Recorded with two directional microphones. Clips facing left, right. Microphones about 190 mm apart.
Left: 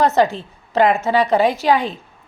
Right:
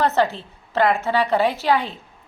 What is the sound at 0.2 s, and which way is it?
A woman's voice, 15° left (ahead or behind).